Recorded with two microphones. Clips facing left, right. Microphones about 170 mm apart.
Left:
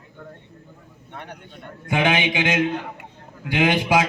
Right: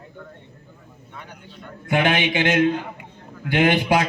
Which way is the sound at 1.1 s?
65° left (ahead or behind).